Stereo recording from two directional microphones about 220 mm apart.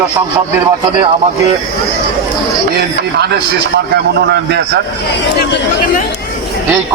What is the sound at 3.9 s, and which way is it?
Speech, 50° right (ahead or behind).